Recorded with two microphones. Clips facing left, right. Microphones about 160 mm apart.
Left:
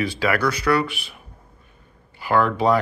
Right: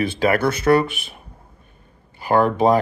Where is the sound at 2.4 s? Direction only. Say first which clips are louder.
Right 3 dB; 45° right (ahead or behind).